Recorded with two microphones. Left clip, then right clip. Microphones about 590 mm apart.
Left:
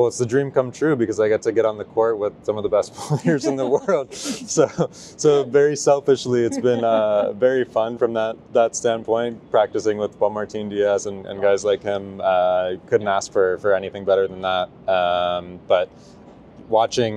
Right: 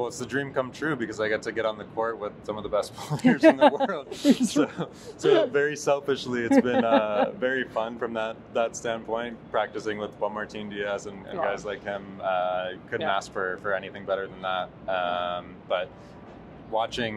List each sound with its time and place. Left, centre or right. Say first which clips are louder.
0.0 s speech: left 11 dB; left
3.7 s speech: left 8 dB; left